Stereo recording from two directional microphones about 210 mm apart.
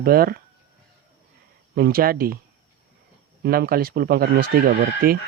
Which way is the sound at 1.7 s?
45° right (ahead or behind).